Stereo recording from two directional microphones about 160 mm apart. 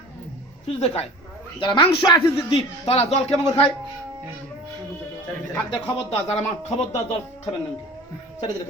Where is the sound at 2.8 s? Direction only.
40° left (ahead or behind).